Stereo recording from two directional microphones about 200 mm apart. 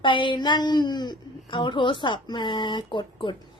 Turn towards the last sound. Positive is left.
turn(degrees=25)  # may be behind; listen again after turning